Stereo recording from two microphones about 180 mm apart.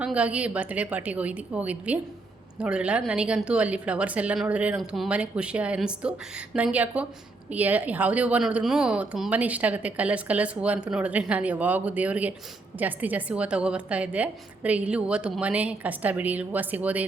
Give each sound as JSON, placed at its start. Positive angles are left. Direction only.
{"t": 0.0, "sound": "a woman's voice", "side_deg": -5}